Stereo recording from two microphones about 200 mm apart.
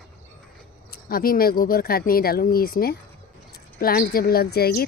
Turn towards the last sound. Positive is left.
turn(degrees=50)  # may be behind; listen again after turning